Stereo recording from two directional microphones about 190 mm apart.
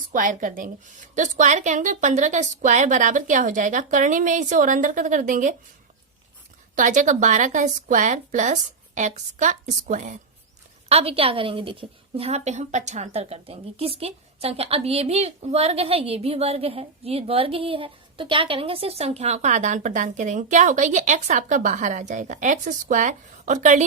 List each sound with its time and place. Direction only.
0.1 s a woman's voice: 45° right (ahead or behind)
6.7 s a woman's voice: 40° right (ahead or behind)
10.8 s a woman's voice: 30° right (ahead or behind)